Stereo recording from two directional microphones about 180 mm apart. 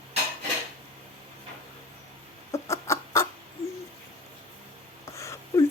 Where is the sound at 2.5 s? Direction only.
15° left (ahead or behind).